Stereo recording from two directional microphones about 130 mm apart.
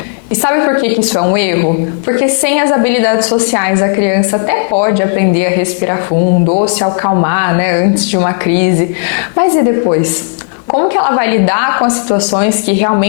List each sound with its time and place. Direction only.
0.4 s a woman's voice: 20° left (ahead or behind)